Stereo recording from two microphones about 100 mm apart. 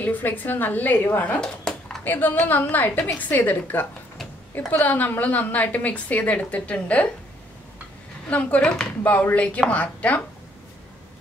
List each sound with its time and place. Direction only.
0.0 s a woman's voice: 15° left (ahead or behind)
2.0 s a woman's voice: 20° left (ahead or behind)
8.3 s a woman's voice: 15° left (ahead or behind)